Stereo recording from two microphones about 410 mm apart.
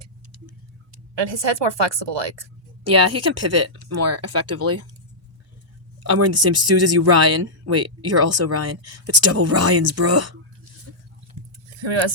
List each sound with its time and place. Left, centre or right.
1.1 s a woman's voice: right
2.8 s speech: right
6.0 s speech: right
11.8 s a woman's voice: right